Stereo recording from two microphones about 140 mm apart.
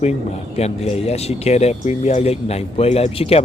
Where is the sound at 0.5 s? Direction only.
50° left (ahead or behind).